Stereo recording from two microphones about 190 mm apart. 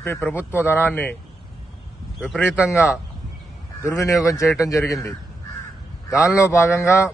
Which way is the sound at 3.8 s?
15° left (ahead or behind).